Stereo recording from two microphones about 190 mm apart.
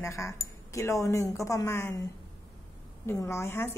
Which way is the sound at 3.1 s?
15° left (ahead or behind).